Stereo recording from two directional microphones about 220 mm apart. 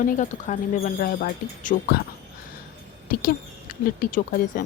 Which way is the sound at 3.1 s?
40° left (ahead or behind).